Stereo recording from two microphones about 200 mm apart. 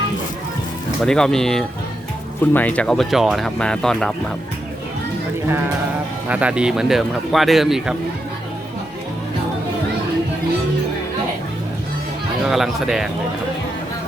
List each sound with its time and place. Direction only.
1.0 s speech: 5° left (ahead or behind)
5.5 s a sound: 10° right (ahead or behind)
6.2 s speech: 5° right (ahead or behind)
12.5 s speech: centre (ahead or behind)